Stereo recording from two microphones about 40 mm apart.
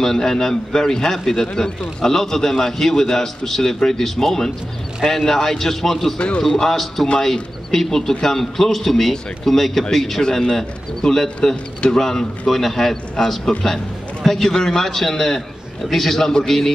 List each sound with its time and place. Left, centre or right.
0.0 s speech: centre
6.1 s a man's voice: left
6.4 s speech: centre